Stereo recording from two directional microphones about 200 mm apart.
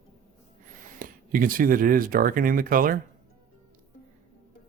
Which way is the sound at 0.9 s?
45° right (ahead or behind).